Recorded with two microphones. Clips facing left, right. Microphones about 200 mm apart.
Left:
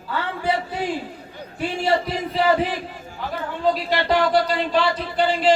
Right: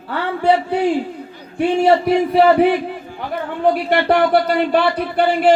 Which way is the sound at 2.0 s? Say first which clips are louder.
Right 8 dB; 60° right (ahead or behind).